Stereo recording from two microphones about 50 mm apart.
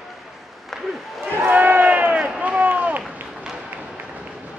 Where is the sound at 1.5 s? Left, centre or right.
Right.